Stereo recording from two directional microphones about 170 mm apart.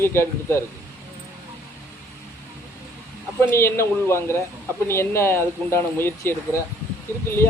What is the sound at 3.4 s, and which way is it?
Speech, 15° left (ahead or behind).